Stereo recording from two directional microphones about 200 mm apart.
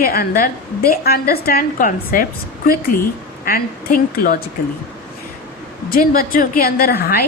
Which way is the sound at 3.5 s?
45° left (ahead or behind).